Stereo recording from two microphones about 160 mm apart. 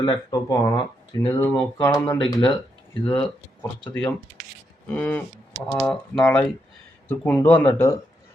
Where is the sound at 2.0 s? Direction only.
10° left (ahead or behind).